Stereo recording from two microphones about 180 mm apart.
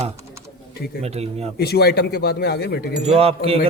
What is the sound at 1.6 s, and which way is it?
Speech, 65° left (ahead or behind).